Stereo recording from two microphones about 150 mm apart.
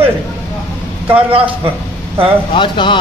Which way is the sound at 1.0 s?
35° right (ahead or behind).